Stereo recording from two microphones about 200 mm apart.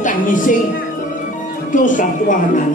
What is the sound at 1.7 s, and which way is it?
Speech, 40° left (ahead or behind).